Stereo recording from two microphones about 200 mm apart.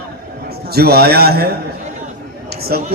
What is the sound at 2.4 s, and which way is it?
Chatter, 50° right (ahead or behind).